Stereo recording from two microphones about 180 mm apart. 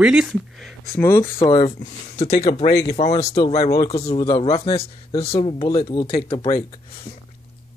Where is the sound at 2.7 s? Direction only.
60° left (ahead or behind).